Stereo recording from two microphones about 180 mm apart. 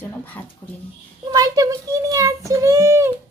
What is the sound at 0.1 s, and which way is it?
Speech, 10° left (ahead or behind).